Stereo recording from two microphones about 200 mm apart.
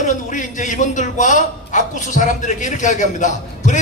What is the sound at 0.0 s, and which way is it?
A man's voice, 40° left (ahead or behind).